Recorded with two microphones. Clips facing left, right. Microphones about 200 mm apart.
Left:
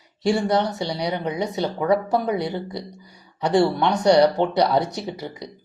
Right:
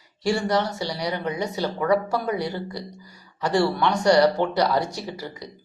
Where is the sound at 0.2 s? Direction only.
20° left (ahead or behind).